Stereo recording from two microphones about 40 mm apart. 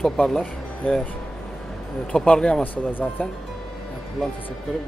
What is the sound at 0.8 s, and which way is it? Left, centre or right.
Speech, left.